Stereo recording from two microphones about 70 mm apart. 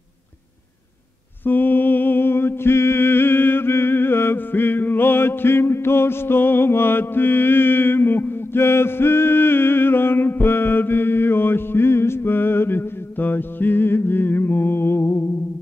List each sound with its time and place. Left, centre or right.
1.4 s mantra: left